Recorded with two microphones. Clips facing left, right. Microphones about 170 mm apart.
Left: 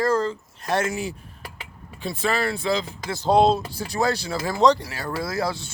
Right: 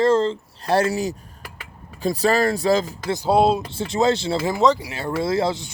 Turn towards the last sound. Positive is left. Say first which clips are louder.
# right 5 dB
turn(degrees=-20)  # may be behind; listen again after turning